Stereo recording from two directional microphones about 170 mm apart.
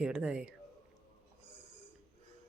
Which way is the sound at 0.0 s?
5° right (ahead or behind).